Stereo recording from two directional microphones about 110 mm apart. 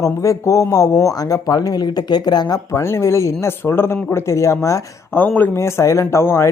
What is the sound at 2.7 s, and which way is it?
A woman's voice, 25° left (ahead or behind).